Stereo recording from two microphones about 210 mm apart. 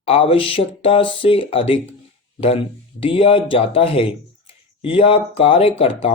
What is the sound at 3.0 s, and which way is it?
Speech, 25° left (ahead or behind).